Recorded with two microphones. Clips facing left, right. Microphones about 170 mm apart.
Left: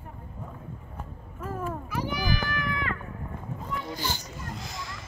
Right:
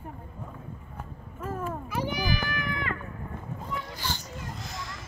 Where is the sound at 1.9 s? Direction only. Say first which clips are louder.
Right 1 dB; 20° right (ahead or behind).